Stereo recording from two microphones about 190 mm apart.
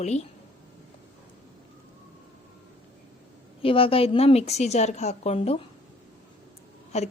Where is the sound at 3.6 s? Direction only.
30° left (ahead or behind).